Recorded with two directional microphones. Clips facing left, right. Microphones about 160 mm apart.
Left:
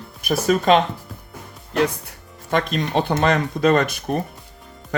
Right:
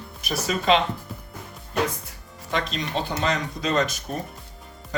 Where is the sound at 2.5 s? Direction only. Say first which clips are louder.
Left 6 dB; 50° left (ahead or behind).